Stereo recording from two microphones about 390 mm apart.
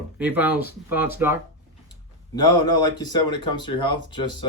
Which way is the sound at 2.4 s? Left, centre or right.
Left.